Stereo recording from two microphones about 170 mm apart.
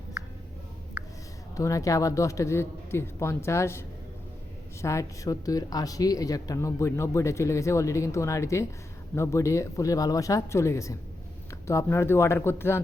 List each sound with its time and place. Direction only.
1.5 s speech: 20° left (ahead or behind)